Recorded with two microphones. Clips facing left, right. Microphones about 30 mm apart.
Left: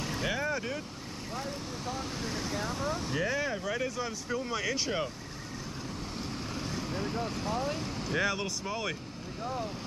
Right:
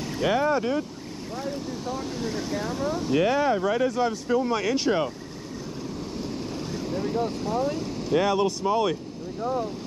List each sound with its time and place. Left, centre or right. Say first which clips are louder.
0.2 s speech: right 11 dB; right
1.9 s vehicle: right 5 dB; centre
3.3 s speech: right 9 dB; right
6.7 s vehicle: right 8 dB; centre
8.2 s speech: right 8 dB; right